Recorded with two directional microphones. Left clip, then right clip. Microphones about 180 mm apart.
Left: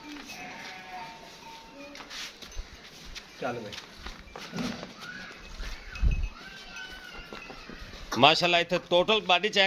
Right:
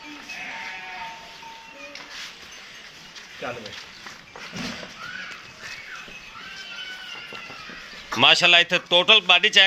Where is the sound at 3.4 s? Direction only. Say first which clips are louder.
Right 1 dB; 45° left (ahead or behind).